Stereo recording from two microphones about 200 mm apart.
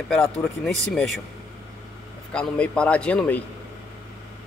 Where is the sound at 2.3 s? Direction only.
5° left (ahead or behind).